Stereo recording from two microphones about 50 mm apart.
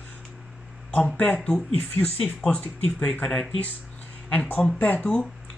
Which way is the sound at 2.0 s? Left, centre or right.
Centre.